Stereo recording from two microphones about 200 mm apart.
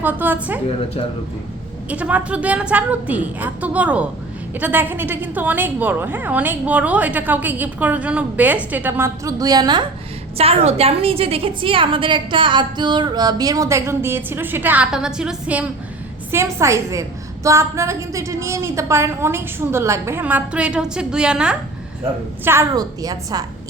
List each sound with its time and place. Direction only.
0.0 s a woman's voice: 10° right (ahead or behind)
1.9 s a woman's voice: 5° right (ahead or behind)
22.4 s a woman's voice: 15° right (ahead or behind)